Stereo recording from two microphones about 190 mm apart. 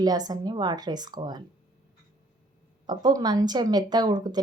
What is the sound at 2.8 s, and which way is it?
A woman's voice, 20° right (ahead or behind).